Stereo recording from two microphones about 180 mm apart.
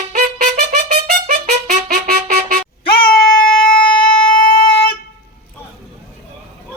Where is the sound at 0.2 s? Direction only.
50° right (ahead or behind).